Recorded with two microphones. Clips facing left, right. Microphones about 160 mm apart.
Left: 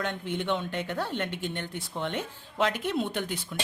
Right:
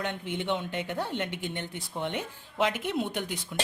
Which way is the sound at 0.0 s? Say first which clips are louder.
Left 1 dB; 15° right (ahead or behind).